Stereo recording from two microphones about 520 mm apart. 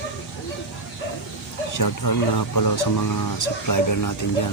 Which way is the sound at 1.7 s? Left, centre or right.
Left.